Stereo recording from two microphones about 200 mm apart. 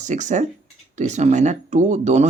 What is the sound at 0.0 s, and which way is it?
Speech, 40° right (ahead or behind).